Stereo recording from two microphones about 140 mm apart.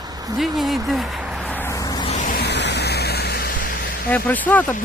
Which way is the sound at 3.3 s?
90° left.